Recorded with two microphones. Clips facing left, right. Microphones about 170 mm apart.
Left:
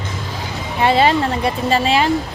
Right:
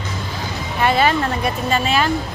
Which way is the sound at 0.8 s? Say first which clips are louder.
Left 2 dB; 25° left (ahead or behind).